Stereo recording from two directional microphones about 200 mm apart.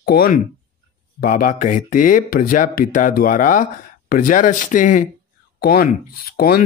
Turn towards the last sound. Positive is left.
turn(degrees=50)  # may be behind; listen again after turning